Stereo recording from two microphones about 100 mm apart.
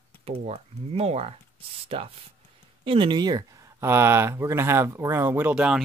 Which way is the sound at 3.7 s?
25° right (ahead or behind).